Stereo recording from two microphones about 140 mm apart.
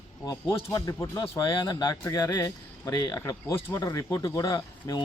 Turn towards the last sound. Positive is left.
turn(degrees=25)  # may be behind; listen again after turning